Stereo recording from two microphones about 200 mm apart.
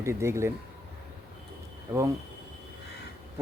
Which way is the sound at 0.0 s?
15° right (ahead or behind).